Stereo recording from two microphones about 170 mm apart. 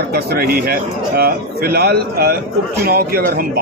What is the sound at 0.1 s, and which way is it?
A man's voice, 65° right (ahead or behind).